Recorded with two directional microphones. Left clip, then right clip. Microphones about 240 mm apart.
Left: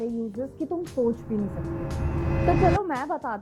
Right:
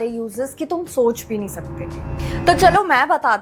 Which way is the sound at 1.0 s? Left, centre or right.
Right.